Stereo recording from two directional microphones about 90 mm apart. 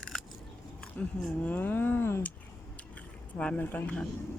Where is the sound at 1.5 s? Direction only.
20° left (ahead or behind).